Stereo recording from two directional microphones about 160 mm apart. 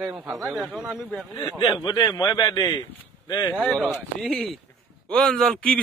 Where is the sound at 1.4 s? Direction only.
25° left (ahead or behind).